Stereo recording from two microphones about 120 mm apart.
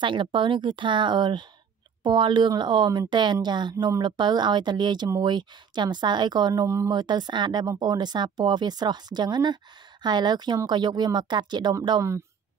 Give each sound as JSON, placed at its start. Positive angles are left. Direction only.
{"t": 0.0, "sound": "speech", "side_deg": -40}